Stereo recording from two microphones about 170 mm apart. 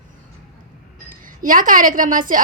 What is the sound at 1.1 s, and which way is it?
A woman's voice, 50° right (ahead or behind).